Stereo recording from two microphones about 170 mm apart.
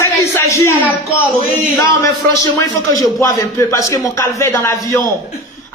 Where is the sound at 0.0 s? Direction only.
15° left (ahead or behind).